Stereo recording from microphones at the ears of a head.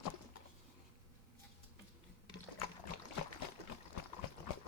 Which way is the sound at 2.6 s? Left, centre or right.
Left.